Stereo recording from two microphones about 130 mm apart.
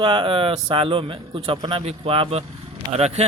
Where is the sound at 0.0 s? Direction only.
40° right (ahead or behind).